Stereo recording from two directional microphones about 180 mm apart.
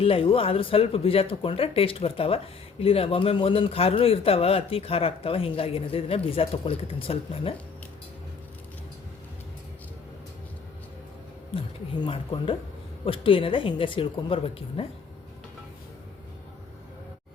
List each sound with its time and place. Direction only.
0.0 s speech: 30° left (ahead or behind)
11.5 s a woman's voice: 30° left (ahead or behind)